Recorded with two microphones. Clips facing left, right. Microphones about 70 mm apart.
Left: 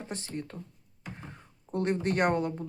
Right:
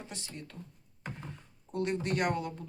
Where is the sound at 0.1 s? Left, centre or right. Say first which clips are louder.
Left 8 dB; left.